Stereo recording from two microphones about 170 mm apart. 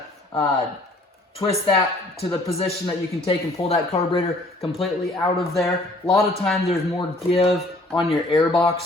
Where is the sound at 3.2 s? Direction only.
35° left (ahead or behind).